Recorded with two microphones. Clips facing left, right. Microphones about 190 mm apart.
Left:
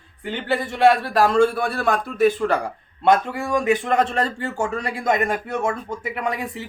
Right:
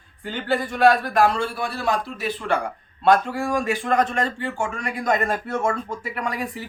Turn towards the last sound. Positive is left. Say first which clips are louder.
# left 2 dB
turn(degrees=25)  # may be behind; listen again after turning